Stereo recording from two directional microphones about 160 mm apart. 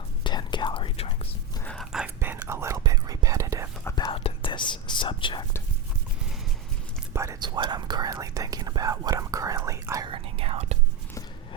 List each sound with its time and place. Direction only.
0.3 s whispering: 30° left (ahead or behind)
1.6 s a sound: 5° left (ahead or behind)
2.0 s whispering: 15° right (ahead or behind)
3.8 s whispering: 20° left (ahead or behind)
4.1 s whispering: 35° left (ahead or behind)
7.1 s whispering: 15° right (ahead or behind)
10.1 s whispering: 35° right (ahead or behind)